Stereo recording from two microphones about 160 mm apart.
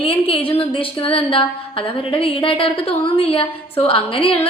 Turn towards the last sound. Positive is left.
turn(degrees=35)  # may be behind; listen again after turning